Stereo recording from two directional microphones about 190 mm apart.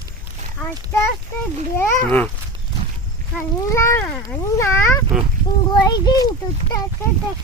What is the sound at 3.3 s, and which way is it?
A child's voice, 15° left (ahead or behind).